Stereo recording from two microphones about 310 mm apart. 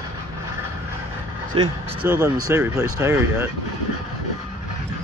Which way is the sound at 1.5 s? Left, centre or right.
Centre.